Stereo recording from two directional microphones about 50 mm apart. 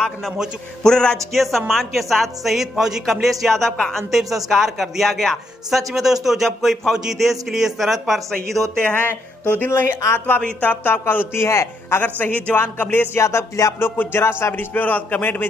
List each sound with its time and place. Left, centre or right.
0.8 s speech: centre
8.9 s speech: left
9.7 s a man's voice: left
10.8 s music: left
11.3 s a man's voice: left
12.0 s speech: left
12.9 s music: left
13.2 s music: left
13.7 s music: left
14.7 s speech: left